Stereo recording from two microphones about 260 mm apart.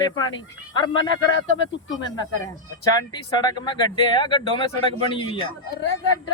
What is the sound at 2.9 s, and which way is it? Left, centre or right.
Speech, centre.